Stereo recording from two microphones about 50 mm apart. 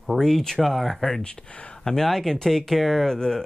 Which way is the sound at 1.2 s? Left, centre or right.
Centre.